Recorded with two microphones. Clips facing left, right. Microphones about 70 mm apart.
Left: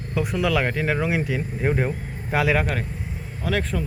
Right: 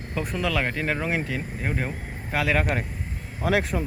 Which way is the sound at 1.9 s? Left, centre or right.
Centre.